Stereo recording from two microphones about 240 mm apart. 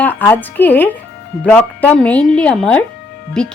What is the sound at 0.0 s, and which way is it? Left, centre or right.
A woman's voice, centre.